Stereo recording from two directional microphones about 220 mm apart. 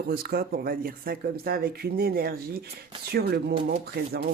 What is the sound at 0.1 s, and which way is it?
Speech, 45° right (ahead or behind).